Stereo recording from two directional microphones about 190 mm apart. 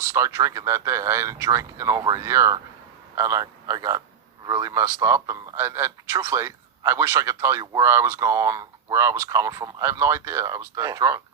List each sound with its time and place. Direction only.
0.1 s a man's voice: 15° right (ahead or behind)